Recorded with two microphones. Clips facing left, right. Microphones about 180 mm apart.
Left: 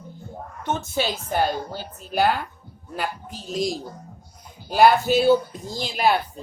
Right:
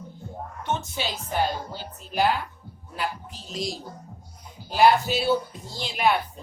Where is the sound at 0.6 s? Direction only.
45° left (ahead or behind).